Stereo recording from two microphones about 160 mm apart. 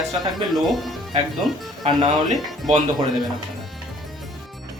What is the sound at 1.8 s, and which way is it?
Speech, 45° right (ahead or behind).